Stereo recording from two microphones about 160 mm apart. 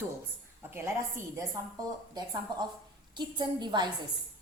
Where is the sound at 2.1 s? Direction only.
25° right (ahead or behind).